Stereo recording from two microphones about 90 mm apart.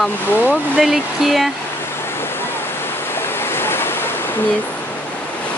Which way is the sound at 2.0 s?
25° left (ahead or behind).